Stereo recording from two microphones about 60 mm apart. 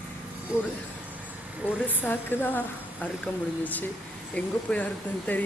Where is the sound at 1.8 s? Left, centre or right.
Left.